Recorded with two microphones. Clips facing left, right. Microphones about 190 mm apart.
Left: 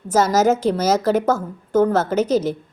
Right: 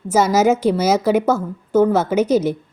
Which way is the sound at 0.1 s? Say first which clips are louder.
Right 1 dB; 10° right (ahead or behind).